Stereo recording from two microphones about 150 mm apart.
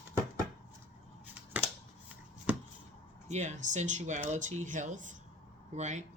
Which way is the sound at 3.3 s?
50° right (ahead or behind).